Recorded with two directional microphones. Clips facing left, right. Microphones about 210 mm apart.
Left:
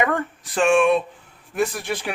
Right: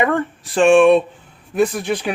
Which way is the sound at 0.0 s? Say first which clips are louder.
Right 4 dB; 30° right (ahead or behind).